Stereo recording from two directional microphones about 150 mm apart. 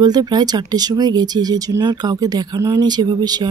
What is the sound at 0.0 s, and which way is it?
Speech, 25° right (ahead or behind).